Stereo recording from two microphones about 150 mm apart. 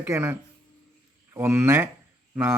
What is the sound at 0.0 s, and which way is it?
Speech, 15° right (ahead or behind).